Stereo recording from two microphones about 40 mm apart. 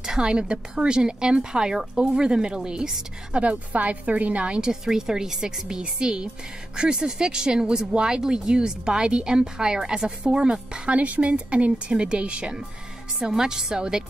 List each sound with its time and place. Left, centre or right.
0.0 s a woman's voice: centre
3.4 s a woman's voice: right
4.6 s a woman's voice: centre
13.2 s a woman's voice: centre